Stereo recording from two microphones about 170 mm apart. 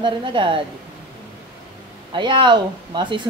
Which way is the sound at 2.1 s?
30° right (ahead or behind).